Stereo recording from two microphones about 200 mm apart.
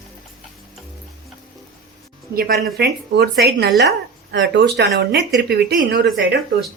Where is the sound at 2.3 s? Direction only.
50° right (ahead or behind).